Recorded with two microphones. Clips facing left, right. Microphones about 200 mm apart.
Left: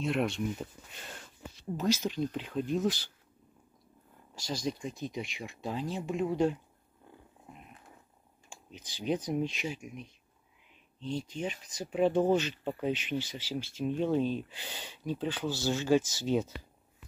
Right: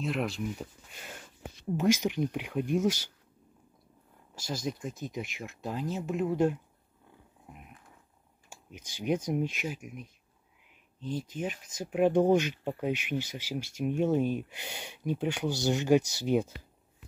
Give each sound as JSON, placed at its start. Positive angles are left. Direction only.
{"t": 0.0, "sound": "speech", "side_deg": 0}
{"t": 1.6, "sound": "speech", "side_deg": -15}
{"t": 4.4, "sound": "speech", "side_deg": -5}
{"t": 8.5, "sound": "computer keyboard", "side_deg": -10}
{"t": 9.3, "sound": "speech", "side_deg": -10}
{"t": 11.1, "sound": "speech", "side_deg": -5}